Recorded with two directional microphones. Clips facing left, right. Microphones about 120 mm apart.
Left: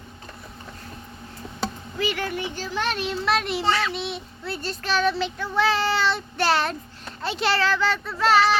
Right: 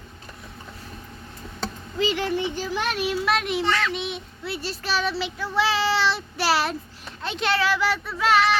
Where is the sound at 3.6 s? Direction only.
30° left (ahead or behind).